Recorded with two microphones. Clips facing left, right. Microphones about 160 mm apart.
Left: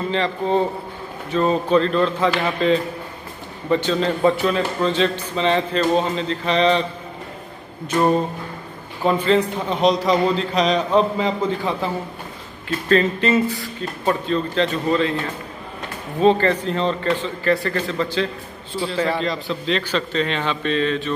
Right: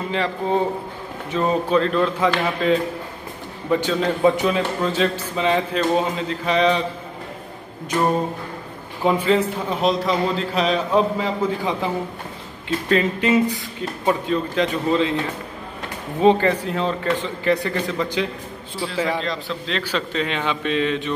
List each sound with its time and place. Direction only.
0.1 s a man's voice: 10° right (ahead or behind)
9.0 s a man's voice: 10° right (ahead or behind)
12.6 s a man's voice: 10° right (ahead or behind)
16.2 s a man's voice: 15° right (ahead or behind)
19.1 s a man's voice: centre (ahead or behind); by 21.1 s 15° right (ahead or behind)